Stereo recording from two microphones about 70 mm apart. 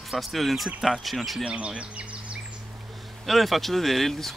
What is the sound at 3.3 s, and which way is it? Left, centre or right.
Speech, centre.